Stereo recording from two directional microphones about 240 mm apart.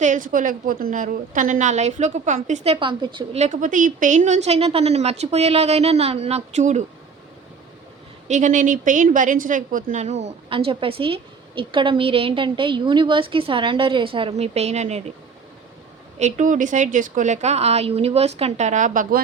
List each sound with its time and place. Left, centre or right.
0.0 s a woman's voice: right
2.7 s a woman's voice: centre
8.3 s a woman's voice: right
16.1 s a woman's voice: right